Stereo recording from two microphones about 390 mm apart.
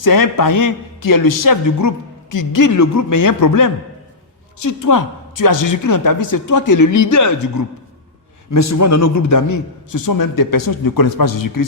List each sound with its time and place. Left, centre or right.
0.0 s a woman's voice: left